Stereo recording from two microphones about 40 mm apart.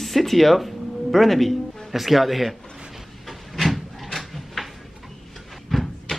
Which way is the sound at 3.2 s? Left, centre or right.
Centre.